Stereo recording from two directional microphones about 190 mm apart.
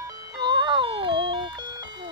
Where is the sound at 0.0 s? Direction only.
25° right (ahead or behind).